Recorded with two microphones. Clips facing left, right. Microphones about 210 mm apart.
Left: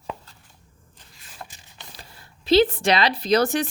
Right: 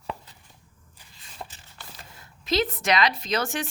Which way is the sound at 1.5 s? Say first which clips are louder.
Even; 15° left (ahead or behind).